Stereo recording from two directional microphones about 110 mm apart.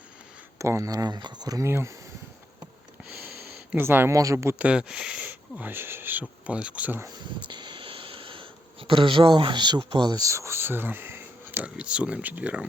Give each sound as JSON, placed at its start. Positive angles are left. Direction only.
{"t": 0.6, "sound": "speech", "side_deg": -30}
{"t": 3.7, "sound": "speech", "side_deg": -15}
{"t": 4.5, "sound": "speech", "side_deg": -10}
{"t": 7.0, "sound": "speech", "side_deg": -40}